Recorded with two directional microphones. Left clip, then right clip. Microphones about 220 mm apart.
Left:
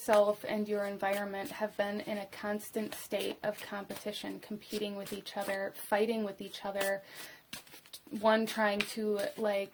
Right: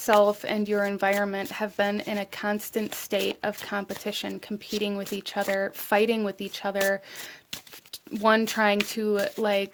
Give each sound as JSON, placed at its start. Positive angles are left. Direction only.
{"t": 0.0, "sound": "speech", "side_deg": -40}
{"t": 8.2, "sound": "speech", "side_deg": -40}